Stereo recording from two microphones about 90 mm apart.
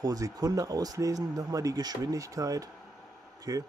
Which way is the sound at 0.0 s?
45° right (ahead or behind).